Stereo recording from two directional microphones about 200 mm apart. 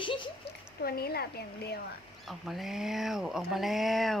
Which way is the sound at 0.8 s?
50° left (ahead or behind).